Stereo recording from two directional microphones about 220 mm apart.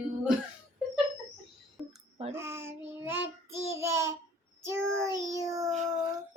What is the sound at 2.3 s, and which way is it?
Child singing, 10° right (ahead or behind).